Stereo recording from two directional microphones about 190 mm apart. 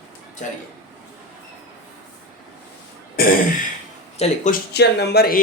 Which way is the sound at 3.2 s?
50° left (ahead or behind).